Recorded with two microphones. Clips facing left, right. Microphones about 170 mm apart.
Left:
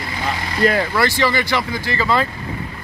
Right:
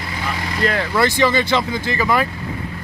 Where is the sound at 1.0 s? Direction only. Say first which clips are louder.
Right 2 dB; 20° right (ahead or behind).